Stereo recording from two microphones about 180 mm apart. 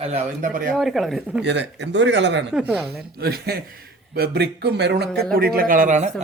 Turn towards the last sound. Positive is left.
turn(degrees=-40)  # may be behind; listen again after turning